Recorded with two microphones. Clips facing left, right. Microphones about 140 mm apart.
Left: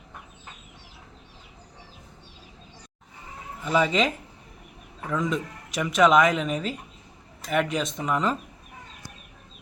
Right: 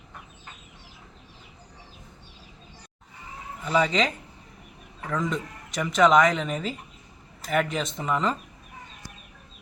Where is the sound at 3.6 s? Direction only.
5° left (ahead or behind).